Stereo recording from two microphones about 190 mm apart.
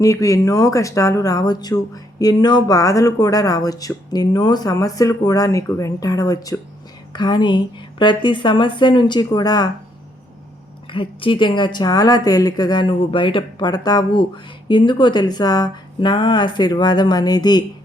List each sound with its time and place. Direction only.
0.0 s a woman's voice: 15° left (ahead or behind)
10.9 s a woman's voice: 25° left (ahead or behind)